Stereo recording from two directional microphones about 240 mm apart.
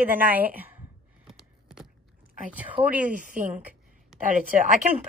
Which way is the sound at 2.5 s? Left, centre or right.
Centre.